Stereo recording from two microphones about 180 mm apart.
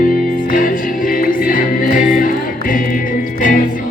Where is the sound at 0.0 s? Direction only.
50° left (ahead or behind).